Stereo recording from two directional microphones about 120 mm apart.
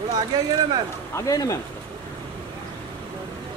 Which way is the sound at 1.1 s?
30° left (ahead or behind).